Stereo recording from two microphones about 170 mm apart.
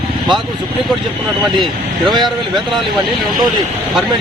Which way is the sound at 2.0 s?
25° right (ahead or behind).